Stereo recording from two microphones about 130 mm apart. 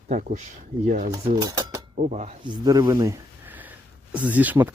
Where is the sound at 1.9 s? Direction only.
70° right (ahead or behind).